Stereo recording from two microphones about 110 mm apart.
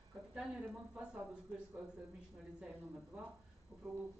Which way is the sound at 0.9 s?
10° right (ahead or behind).